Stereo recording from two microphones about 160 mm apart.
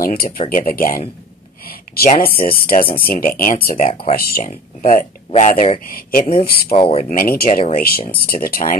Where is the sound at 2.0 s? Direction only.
65° left (ahead or behind).